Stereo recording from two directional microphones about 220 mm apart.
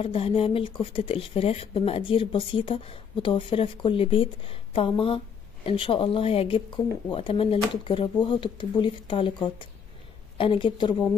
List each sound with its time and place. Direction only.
0.0 s speech: 25° left (ahead or behind)